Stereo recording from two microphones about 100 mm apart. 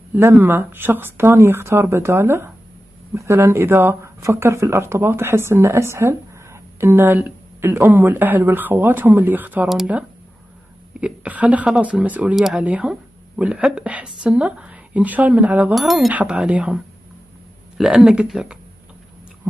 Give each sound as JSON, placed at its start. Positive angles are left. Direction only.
{"t": 0.1, "sound": "a woman's voice", "side_deg": -25}
{"t": 15.7, "sound": "speech", "side_deg": 0}
{"t": 16.1, "sound": "a woman's voice", "side_deg": -10}
{"t": 17.8, "sound": "a woman's voice", "side_deg": -5}